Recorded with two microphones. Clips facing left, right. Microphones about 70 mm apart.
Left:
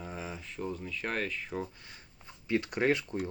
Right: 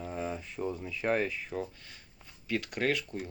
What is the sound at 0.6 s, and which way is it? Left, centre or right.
Speech, centre.